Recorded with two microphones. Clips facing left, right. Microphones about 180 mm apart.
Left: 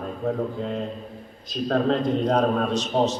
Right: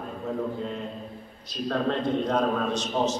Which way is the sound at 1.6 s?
40° left (ahead or behind).